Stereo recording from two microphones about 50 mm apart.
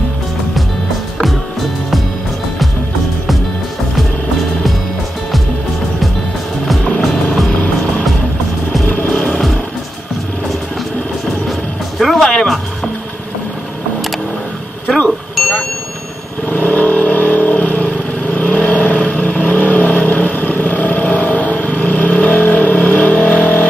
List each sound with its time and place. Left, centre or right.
6.6 s vehicle: centre
8.8 s music: left
12.0 s music: centre
16.4 s vehicle: left